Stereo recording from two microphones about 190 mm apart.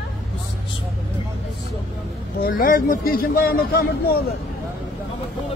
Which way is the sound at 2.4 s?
50° left (ahead or behind).